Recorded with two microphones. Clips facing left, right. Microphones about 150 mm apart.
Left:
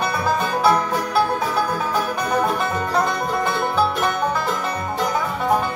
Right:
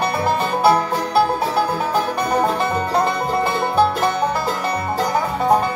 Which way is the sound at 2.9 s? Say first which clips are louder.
Right 1 dB; 35° right (ahead or behind).